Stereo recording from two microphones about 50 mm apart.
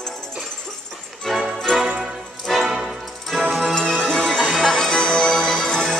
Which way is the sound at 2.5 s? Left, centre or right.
Centre.